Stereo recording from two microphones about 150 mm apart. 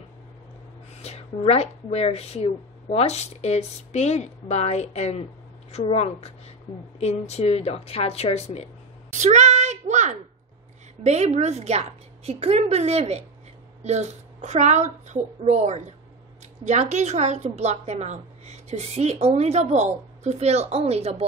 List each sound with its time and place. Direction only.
1.0 s a woman's voice: 45° left (ahead or behind)
9.1 s child singing: 55° right (ahead or behind)
11.1 s a woman's voice: 50° right (ahead or behind)